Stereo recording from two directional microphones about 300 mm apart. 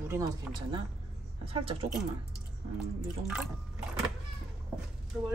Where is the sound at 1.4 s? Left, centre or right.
Centre.